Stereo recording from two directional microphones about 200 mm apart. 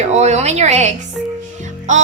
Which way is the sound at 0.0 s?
35° right (ahead or behind).